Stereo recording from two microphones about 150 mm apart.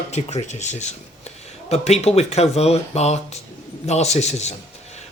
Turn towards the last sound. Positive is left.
turn(degrees=50)  # may be behind; listen again after turning